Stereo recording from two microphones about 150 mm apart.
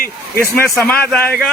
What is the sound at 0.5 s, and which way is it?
Speech, 15° left (ahead or behind).